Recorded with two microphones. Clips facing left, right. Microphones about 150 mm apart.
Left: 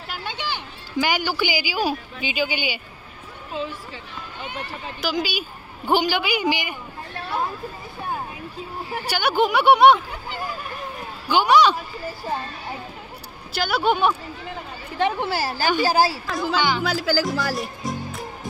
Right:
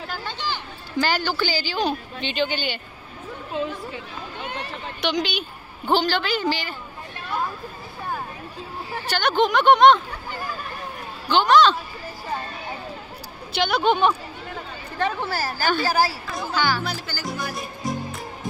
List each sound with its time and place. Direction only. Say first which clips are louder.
0.2 s speech: even; 15° left (ahead or behind)
5.0 s speech: right 1 dB; 5° left (ahead or behind)
8.9 s speech: even; 10° left (ahead or behind)
13.5 s a woman's voice: right 1 dB; 5° left (ahead or behind); by 15.6 s 25° left (ahead or behind)
15.6 s speech: left 2 dB; 15° left (ahead or behind)
16.1 s speech: left 5 dB; 90° left